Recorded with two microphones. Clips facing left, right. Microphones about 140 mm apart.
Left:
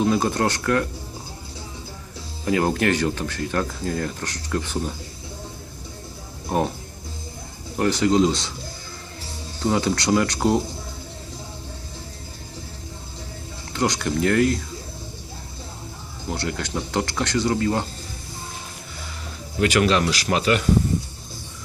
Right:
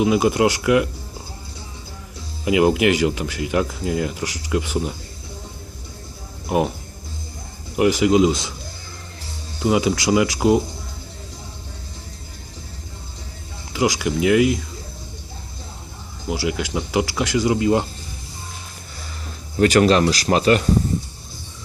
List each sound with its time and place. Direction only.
0.0 s speech: 10° right (ahead or behind)
2.4 s speech: 10° right (ahead or behind)
7.8 s speech: 10° right (ahead or behind)
9.6 s speech: 10° right (ahead or behind)
13.7 s speech: 5° right (ahead or behind)
16.3 s speech: 10° right (ahead or behind)
19.5 s speech: 40° right (ahead or behind)